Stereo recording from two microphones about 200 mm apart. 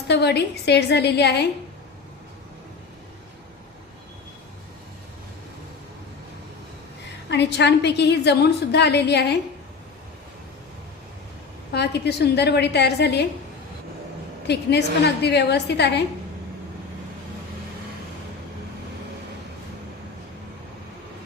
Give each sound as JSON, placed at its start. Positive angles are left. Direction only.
{"t": 0.1, "sound": "a woman's voice", "side_deg": 55}
{"t": 7.3, "sound": "a woman's voice", "side_deg": 60}
{"t": 11.7, "sound": "a woman's voice", "side_deg": 55}
{"t": 14.4, "sound": "a woman's voice", "side_deg": 55}